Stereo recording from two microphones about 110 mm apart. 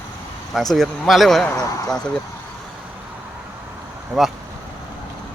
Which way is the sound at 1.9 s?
5° left (ahead or behind).